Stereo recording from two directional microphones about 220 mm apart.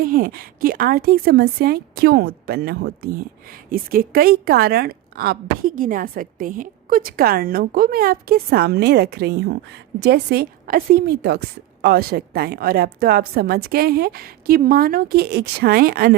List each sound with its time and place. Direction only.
0.0 s a woman's voice: 40° right (ahead or behind)